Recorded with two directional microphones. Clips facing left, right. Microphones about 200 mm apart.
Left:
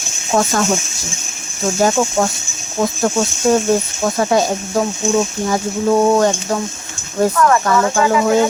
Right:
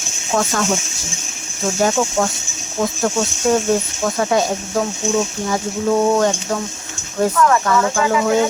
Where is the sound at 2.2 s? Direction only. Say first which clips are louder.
Left 2 dB; 35° left (ahead or behind).